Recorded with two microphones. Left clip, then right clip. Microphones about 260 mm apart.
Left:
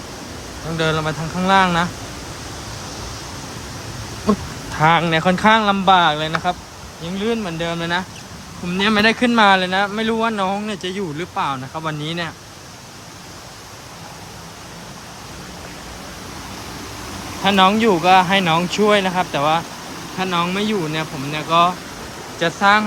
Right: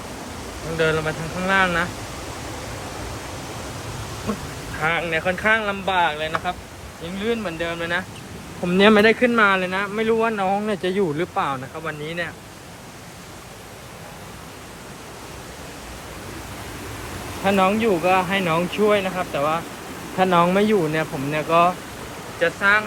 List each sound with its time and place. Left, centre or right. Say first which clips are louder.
0.8 s speech: left 1 dB; centre
4.8 s speech: left 7 dB; left
8.7 s speech: right 2 dB; centre
17.4 s speech: left 5 dB; centre
20.1 s speech: right 4 dB; centre